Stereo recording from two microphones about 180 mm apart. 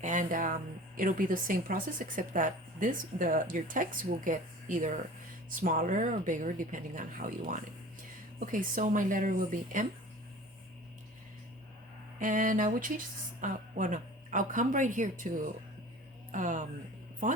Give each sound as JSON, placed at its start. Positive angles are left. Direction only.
{"t": 0.0, "sound": "speech", "side_deg": -45}
{"t": 12.2, "sound": "speech", "side_deg": -45}